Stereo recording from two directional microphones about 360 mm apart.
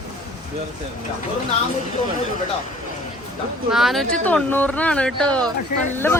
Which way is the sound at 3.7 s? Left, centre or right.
Centre.